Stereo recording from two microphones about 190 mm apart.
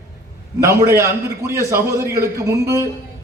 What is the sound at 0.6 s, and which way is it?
A man's voice, 15° right (ahead or behind).